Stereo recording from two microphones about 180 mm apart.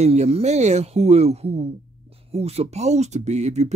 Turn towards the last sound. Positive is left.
turn(degrees=-40)  # may be behind; listen again after turning